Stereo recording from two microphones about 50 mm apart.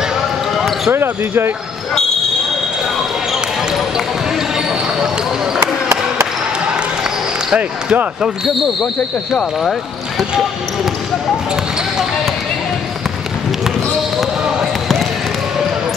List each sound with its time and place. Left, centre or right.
0.6 s basketball bounce: centre
5.6 s a sound: right
7.5 s speech: right